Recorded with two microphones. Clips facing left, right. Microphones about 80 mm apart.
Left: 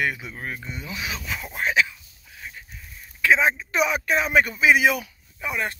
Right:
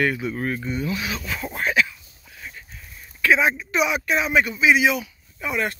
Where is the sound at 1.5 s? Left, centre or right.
Centre.